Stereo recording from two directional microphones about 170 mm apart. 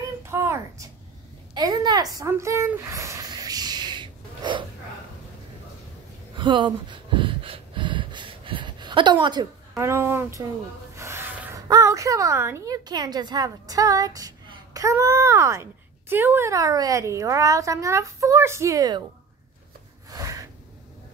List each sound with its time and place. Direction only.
0.2 s a sound: 15° right (ahead or behind)
1.5 s a woman's voice: 25° right (ahead or behind)
2.1 s a sound: 15° right (ahead or behind)
6.3 s gasp: 30° right (ahead or behind)
11.0 s speech: 15° right (ahead or behind)
20.1 s snort: 20° right (ahead or behind)